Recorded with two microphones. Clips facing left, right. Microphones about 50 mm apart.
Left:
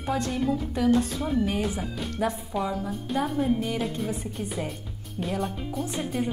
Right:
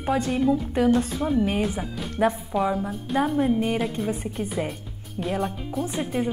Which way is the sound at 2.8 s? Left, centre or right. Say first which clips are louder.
Right 3 dB; centre.